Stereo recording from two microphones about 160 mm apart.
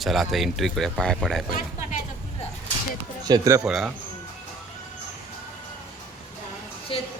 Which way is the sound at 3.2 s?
25° right (ahead or behind).